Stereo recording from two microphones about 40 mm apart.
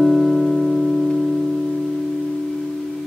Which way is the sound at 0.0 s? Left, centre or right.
Centre.